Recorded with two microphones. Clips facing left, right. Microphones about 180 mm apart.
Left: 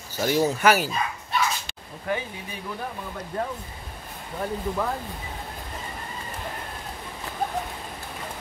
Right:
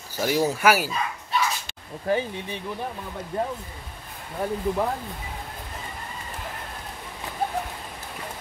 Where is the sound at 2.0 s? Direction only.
30° right (ahead or behind).